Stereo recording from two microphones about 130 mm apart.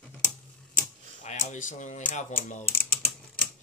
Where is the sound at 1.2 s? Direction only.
65° left (ahead or behind).